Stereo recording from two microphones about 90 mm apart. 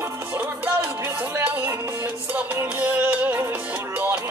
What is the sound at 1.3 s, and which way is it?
Music, 20° right (ahead or behind).